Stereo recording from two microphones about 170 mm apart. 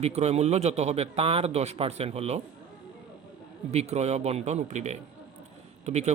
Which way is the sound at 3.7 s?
40° right (ahead or behind).